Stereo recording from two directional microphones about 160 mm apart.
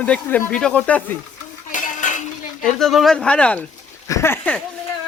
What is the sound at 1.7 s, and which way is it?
Cutlery, 55° left (ahead or behind).